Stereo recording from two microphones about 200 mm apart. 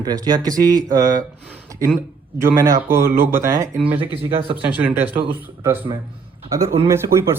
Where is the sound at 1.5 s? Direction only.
10° right (ahead or behind).